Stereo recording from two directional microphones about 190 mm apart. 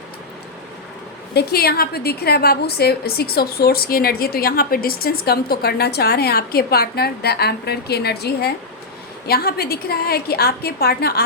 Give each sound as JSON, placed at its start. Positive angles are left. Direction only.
{"t": 1.3, "sound": "a woman's voice", "side_deg": 55}